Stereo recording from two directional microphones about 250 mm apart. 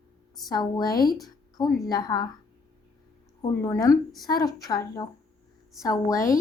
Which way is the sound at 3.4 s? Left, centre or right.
Centre.